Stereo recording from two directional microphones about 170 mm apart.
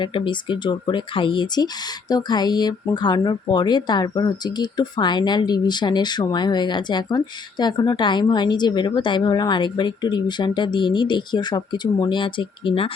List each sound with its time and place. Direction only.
0.0 s speech: 30° left (ahead or behind)